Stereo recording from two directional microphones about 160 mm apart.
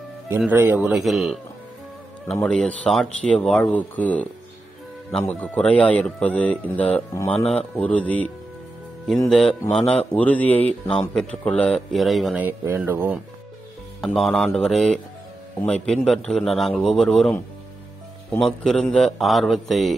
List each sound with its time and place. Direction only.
0.5 s speech: 10° right (ahead or behind)
2.4 s speech: 5° left (ahead or behind)
9.3 s speech: 5° left (ahead or behind)
12.4 s speech: 10° right (ahead or behind)
14.0 s speech: centre (ahead or behind)
18.4 s speech: centre (ahead or behind)